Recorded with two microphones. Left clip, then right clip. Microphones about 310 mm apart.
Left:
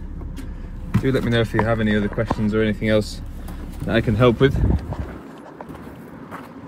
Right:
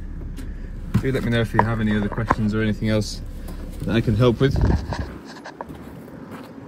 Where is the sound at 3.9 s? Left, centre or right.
Centre.